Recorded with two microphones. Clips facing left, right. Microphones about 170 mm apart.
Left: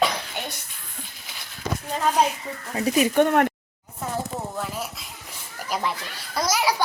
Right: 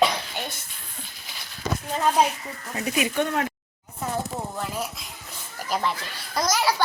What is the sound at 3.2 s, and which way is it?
Speech, 55° left (ahead or behind).